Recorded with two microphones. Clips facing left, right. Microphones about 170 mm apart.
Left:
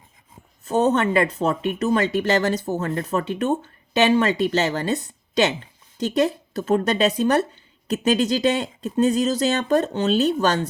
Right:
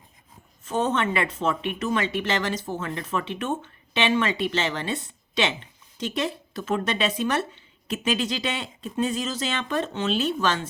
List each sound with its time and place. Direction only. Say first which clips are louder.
0.6 s speech: left 5 dB; 40° left (ahead or behind)